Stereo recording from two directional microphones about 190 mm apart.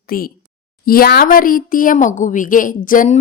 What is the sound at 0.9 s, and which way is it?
A woman's voice, 50° left (ahead or behind).